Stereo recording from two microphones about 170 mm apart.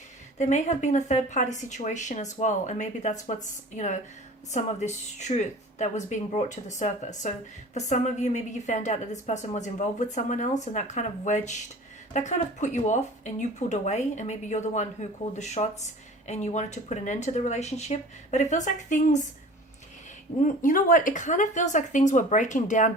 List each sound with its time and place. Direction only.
0.3 s speech: 45° left (ahead or behind)
20.4 s speech: 50° left (ahead or behind)